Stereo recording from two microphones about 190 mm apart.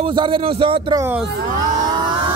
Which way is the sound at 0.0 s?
25° right (ahead or behind).